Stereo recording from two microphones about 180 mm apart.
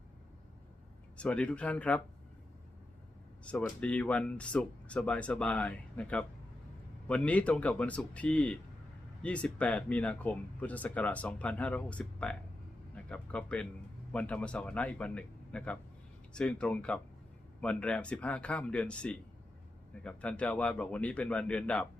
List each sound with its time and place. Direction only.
1.1 s speech: 5° left (ahead or behind)
3.4 s speech: 5° left (ahead or behind)